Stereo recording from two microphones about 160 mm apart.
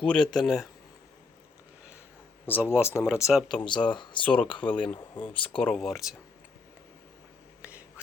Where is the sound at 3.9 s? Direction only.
30° left (ahead or behind).